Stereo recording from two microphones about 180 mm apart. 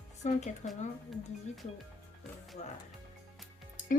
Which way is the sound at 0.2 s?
40° left (ahead or behind).